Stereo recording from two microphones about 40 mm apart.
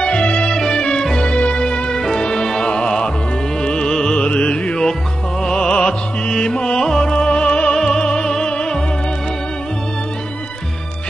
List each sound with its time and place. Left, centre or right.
0.0 s music: left
7.7 s music: centre